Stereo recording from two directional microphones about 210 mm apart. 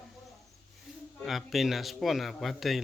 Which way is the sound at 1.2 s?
Centre (ahead or behind).